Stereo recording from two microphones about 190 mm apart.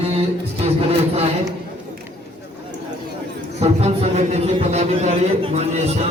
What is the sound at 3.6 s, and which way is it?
A man's voice, 35° right (ahead or behind).